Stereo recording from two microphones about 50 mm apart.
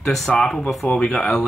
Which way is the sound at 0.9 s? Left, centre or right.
Centre.